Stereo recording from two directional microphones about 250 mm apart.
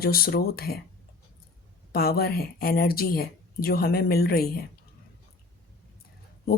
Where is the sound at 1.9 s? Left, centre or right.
Left.